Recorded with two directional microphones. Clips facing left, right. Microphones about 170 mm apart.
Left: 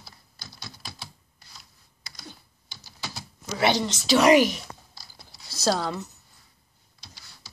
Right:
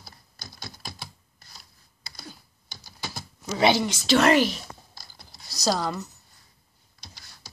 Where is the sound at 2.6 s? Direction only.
45° right (ahead or behind).